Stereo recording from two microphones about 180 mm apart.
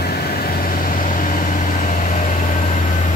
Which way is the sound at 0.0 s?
60° left (ahead or behind).